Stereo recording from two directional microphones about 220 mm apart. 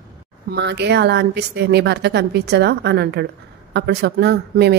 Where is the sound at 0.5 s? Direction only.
50° right (ahead or behind).